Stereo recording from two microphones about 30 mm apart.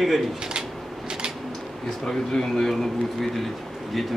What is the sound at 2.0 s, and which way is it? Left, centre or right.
Speech, centre.